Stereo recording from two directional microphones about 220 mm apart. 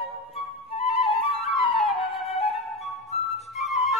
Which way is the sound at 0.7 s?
25° left (ahead or behind).